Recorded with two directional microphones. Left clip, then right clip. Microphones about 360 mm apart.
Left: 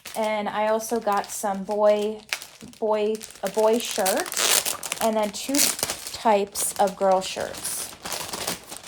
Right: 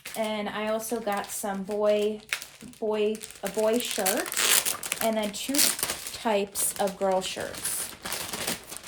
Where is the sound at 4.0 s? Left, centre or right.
Centre.